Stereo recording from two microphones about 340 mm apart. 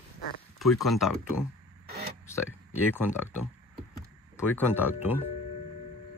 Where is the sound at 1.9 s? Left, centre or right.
Right.